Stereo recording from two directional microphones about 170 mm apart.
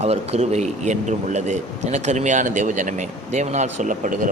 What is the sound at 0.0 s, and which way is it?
A man's voice, 40° right (ahead or behind).